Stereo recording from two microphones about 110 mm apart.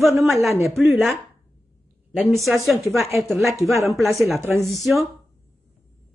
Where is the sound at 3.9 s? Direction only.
Centre (ahead or behind).